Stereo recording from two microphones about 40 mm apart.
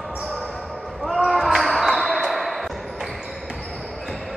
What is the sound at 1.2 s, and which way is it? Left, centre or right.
Basketball bounce, centre.